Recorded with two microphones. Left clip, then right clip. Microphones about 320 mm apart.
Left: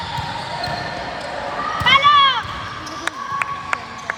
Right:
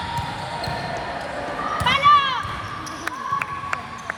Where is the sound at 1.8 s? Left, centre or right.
Left.